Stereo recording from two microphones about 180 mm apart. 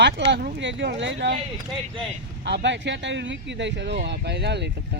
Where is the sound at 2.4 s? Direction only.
75° right (ahead or behind).